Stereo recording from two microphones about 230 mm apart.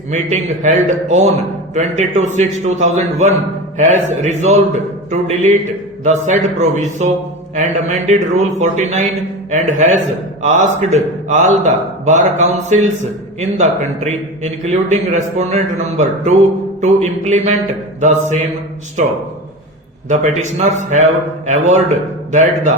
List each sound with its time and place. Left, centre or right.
0.1 s a man's voice: right
20.1 s a man's voice: right
22.3 s a man's voice: right